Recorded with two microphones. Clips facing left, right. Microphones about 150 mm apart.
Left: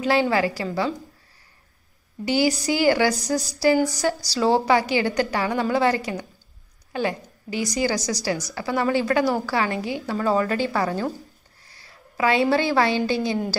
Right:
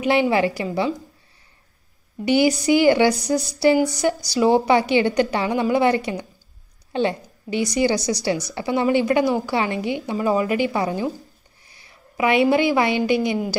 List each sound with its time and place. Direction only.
0.0 s a woman's voice: 20° right (ahead or behind)
2.2 s a woman's voice: 20° right (ahead or behind)